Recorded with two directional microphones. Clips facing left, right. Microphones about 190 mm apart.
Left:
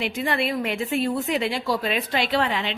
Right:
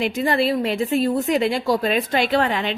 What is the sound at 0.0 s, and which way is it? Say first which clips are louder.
A woman's voice: right 5 dB; 40° right (ahead or behind).